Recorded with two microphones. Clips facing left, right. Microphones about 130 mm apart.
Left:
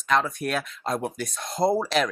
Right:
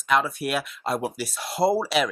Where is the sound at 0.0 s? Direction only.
5° right (ahead or behind).